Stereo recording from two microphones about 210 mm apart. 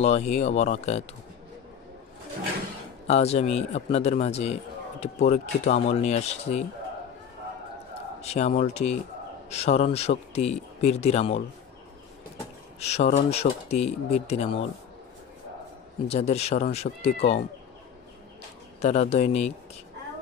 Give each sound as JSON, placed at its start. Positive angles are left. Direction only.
{"t": 0.0, "sound": "speech", "side_deg": 30}
{"t": 3.1, "sound": "speech", "side_deg": 30}
{"t": 8.2, "sound": "speech", "side_deg": 30}
{"t": 12.8, "sound": "speech", "side_deg": 30}
{"t": 16.1, "sound": "speech", "side_deg": 30}
{"t": 18.8, "sound": "speech", "side_deg": 30}